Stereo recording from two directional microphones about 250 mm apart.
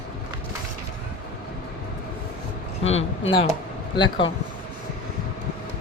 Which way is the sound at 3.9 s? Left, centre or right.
Centre.